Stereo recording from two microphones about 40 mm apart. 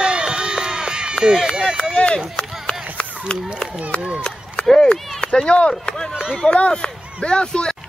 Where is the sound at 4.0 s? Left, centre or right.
Right.